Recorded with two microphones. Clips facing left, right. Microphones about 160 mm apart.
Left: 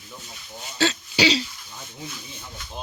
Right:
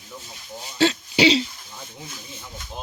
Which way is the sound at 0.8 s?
25° right (ahead or behind).